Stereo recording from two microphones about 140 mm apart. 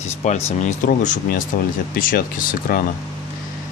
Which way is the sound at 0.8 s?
70° left (ahead or behind).